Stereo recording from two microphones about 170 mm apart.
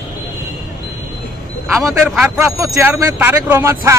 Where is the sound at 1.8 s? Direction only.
5° right (ahead or behind).